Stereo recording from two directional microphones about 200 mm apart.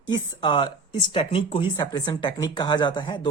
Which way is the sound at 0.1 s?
25° left (ahead or behind).